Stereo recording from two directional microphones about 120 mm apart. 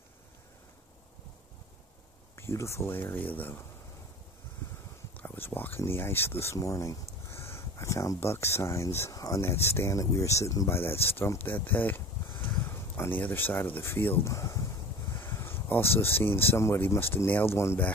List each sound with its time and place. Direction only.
2.3 s speech: 25° left (ahead or behind)
5.1 s speech: 15° left (ahead or behind)
11.4 s a sound: 15° left (ahead or behind)
12.6 s speech: 20° left (ahead or behind)
14.3 s a sound: 25° left (ahead or behind)
17.1 s speech: 15° left (ahead or behind)